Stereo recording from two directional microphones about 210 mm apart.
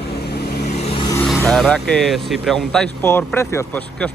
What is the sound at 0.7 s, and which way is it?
Vehicle, 30° left (ahead or behind).